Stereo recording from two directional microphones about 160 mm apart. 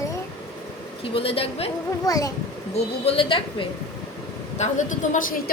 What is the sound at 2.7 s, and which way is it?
Speech, 35° left (ahead or behind).